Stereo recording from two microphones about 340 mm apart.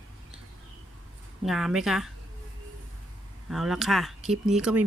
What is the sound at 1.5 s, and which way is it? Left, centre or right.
Speech, centre.